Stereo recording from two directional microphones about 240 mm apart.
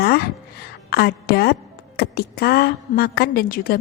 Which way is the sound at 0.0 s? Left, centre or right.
Left.